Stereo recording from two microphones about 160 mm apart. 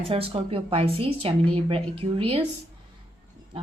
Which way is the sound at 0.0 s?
35° right (ahead or behind).